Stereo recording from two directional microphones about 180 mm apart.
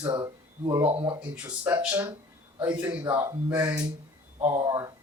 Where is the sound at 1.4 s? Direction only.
10° right (ahead or behind).